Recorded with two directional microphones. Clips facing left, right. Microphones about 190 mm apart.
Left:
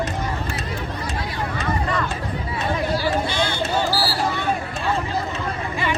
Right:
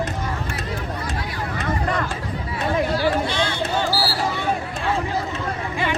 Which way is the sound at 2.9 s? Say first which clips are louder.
Right 1 dB; 10° left (ahead or behind).